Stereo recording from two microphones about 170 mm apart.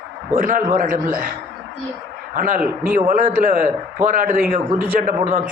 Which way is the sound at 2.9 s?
50° right (ahead or behind).